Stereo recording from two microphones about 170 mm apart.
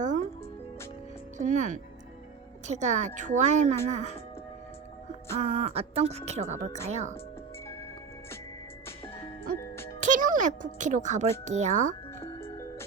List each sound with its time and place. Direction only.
1.4 s a child's voice: 45° right (ahead or behind)
5.4 s a woman's voice: 35° right (ahead or behind)
10.0 s a child's voice: 50° right (ahead or behind)